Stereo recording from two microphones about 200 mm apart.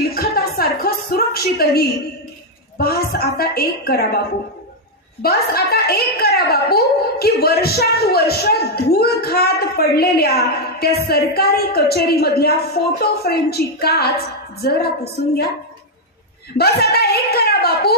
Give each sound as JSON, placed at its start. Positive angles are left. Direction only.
{"t": 0.1, "sound": "a sound", "side_deg": 50}
{"t": 2.8, "sound": "a woman's voice", "side_deg": 50}
{"t": 5.2, "sound": "a woman's voice", "side_deg": 50}
{"t": 16.5, "sound": "a woman's voice", "side_deg": 55}